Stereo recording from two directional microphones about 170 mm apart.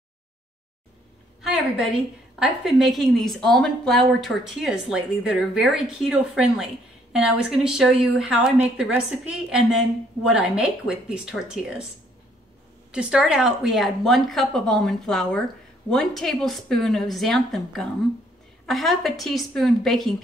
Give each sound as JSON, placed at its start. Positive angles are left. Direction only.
{"t": 2.3, "sound": "a woman's voice", "side_deg": -5}
{"t": 12.9, "sound": "a woman's voice", "side_deg": -5}